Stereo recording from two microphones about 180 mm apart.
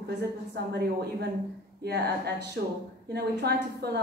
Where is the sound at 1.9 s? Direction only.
65° right (ahead or behind).